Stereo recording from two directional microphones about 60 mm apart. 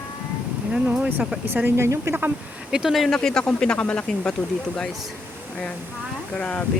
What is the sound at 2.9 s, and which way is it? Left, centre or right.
Speech, centre.